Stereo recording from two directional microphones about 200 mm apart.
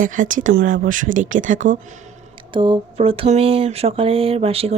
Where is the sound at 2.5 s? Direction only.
25° right (ahead or behind).